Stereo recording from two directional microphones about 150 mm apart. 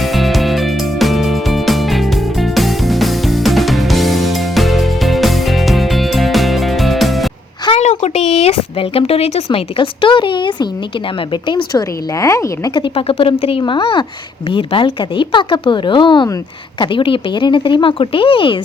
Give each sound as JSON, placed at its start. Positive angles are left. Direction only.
{"t": 0.0, "sound": "music", "side_deg": 0}
{"t": 7.8, "sound": "speech", "side_deg": 45}
{"t": 12.1, "sound": "speech", "side_deg": 20}